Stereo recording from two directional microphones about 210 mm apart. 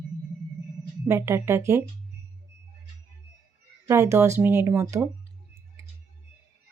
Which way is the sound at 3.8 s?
15° right (ahead or behind).